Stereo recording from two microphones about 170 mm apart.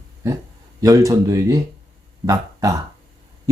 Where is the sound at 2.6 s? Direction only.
20° right (ahead or behind).